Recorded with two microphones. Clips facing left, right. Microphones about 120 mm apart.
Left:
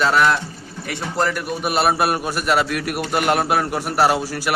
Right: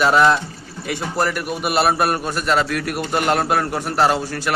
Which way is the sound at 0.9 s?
5° right (ahead or behind).